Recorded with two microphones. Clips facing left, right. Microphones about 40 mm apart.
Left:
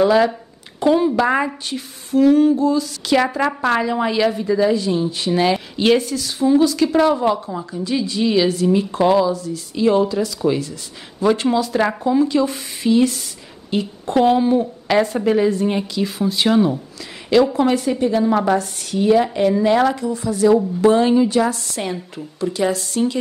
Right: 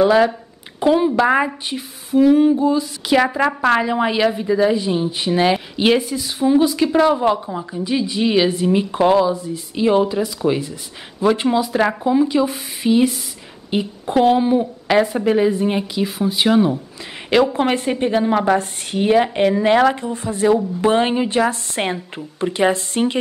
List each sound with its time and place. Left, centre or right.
0.0 s a woman's voice: centre
3.2 s a woman's voice: centre
13.7 s a sound: centre
14.1 s a woman's voice: centre
17.3 s a woman's voice: right